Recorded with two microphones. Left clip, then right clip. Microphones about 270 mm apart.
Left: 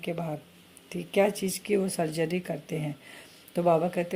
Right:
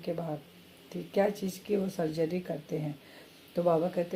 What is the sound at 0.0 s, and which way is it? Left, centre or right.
Speech, left.